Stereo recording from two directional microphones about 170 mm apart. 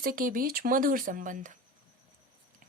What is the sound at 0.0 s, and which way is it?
Speech, 55° right (ahead or behind).